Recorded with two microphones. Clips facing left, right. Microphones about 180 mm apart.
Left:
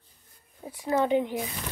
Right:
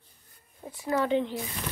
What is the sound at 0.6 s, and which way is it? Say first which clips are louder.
Speech: left 2 dB; 15° left (ahead or behind).